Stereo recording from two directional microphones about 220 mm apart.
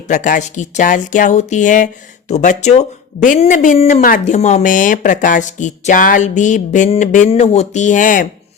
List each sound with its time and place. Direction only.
0.1 s speech: 35° left (ahead or behind)